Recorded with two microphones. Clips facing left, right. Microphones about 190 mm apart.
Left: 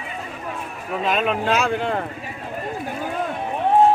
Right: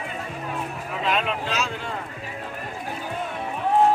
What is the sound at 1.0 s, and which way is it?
Speech, 45° left (ahead or behind).